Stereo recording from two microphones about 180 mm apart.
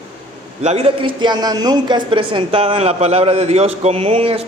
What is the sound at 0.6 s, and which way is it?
A woman's voice, 35° right (ahead or behind).